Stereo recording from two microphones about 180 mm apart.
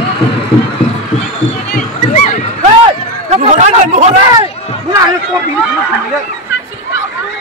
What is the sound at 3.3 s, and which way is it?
Speech, 40° right (ahead or behind).